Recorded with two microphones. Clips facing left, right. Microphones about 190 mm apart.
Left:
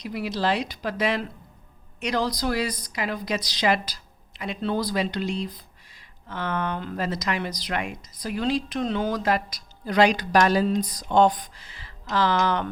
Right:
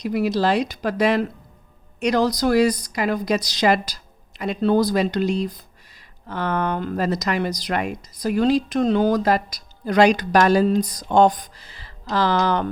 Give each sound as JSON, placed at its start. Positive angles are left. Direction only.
{"t": 0.0, "sound": "speech", "side_deg": -45}